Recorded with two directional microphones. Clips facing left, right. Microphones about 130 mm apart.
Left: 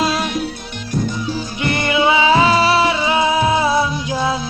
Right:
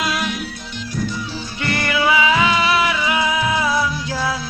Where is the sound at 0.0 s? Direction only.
30° left (ahead or behind).